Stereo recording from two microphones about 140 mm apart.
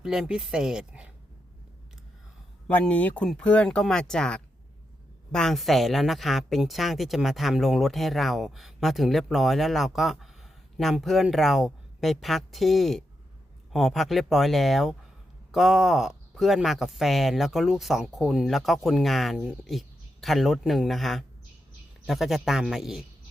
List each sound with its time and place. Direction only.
0.0 s speech: 5° right (ahead or behind)
2.6 s speech: 10° left (ahead or behind)